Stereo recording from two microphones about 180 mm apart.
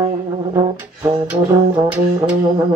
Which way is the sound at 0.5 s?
15° right (ahead or behind).